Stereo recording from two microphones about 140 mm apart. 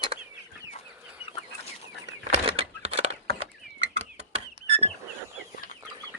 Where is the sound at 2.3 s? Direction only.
50° right (ahead or behind).